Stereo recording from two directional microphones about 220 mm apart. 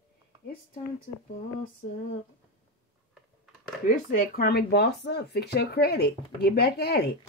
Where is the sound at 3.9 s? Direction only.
40° left (ahead or behind).